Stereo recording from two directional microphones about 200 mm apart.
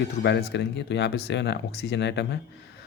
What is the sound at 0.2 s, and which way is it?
Speech, 60° left (ahead or behind).